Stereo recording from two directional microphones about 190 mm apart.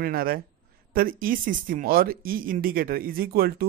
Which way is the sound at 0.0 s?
50° right (ahead or behind).